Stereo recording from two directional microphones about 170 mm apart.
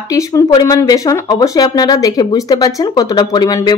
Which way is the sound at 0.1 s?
20° left (ahead or behind).